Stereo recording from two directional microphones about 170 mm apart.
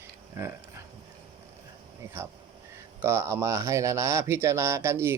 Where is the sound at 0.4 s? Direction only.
15° right (ahead or behind).